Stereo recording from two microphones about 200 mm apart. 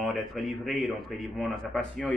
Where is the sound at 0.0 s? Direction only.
Centre (ahead or behind).